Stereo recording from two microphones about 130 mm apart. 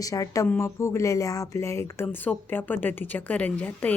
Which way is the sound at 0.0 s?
25° left (ahead or behind).